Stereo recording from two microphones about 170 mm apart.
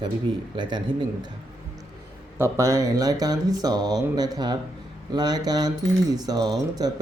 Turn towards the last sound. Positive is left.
turn(degrees=-25)  # may be behind; listen again after turning